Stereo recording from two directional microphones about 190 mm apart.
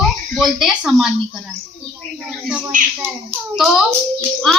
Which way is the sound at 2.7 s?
45° right (ahead or behind).